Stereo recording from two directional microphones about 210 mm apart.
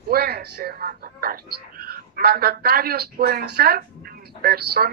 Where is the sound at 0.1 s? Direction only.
45° right (ahead or behind).